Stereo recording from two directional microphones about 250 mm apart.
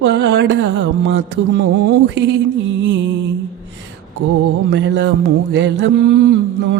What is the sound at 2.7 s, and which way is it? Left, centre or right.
Music, right.